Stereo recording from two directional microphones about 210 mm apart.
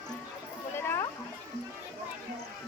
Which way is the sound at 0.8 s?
10° left (ahead or behind).